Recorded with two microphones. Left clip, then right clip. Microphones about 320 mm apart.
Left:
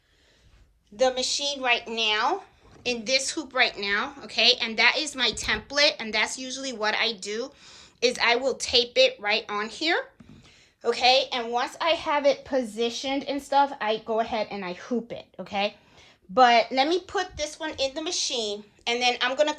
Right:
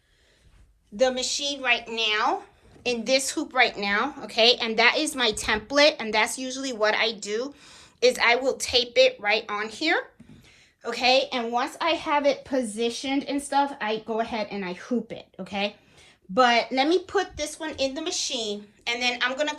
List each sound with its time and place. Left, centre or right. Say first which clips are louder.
0.9 s a woman's voice: even; centre
10.8 s a woman's voice: left 1 dB; left